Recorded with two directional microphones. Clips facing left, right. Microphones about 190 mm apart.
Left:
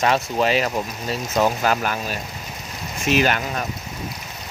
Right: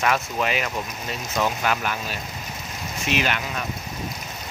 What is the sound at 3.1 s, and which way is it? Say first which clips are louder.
Speech: left 6 dB; 40° left (ahead or behind).